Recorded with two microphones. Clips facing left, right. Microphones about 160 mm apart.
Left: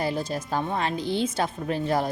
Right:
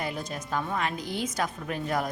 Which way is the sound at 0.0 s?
30° left (ahead or behind).